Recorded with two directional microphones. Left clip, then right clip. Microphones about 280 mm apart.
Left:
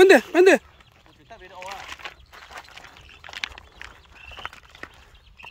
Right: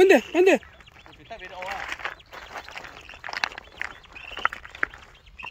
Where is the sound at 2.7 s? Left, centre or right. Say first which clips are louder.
Right 5 dB; centre.